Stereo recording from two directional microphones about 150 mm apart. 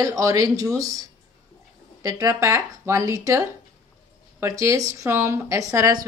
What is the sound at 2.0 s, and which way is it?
Speech, 20° right (ahead or behind).